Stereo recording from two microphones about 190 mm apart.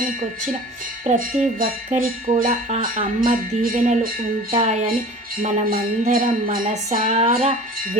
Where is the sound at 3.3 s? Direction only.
40° right (ahead or behind).